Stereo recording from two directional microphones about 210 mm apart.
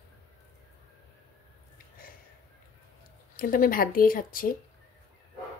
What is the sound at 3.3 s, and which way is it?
Speech, 40° left (ahead or behind).